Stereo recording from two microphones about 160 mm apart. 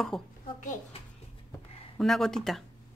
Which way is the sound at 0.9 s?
35° left (ahead or behind).